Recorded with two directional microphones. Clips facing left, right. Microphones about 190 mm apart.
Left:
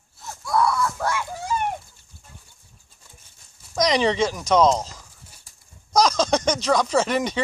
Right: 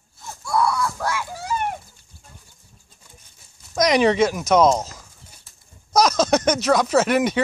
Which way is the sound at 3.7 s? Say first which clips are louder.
Right 3 dB; 10° right (ahead or behind).